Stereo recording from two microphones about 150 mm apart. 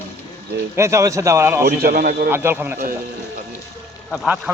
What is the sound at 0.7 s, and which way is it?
Speech, 20° right (ahead or behind).